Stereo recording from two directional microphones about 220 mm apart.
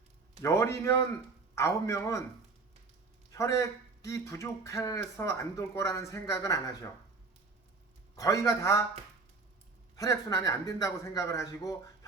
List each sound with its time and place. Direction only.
0.4 s speech: 15° left (ahead or behind)
3.3 s speech: 15° left (ahead or behind)
8.1 s speech: 15° left (ahead or behind)
9.9 s speech: 15° left (ahead or behind)